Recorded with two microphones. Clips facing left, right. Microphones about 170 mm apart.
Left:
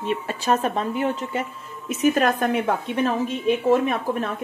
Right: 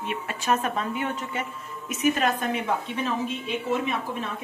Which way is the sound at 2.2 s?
50° left (ahead or behind).